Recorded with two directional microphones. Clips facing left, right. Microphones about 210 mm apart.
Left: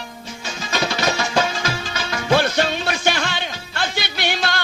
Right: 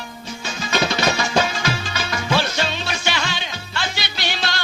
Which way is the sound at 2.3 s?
55° left (ahead or behind).